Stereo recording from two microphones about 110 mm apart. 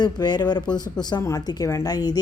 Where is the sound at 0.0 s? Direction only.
40° left (ahead or behind).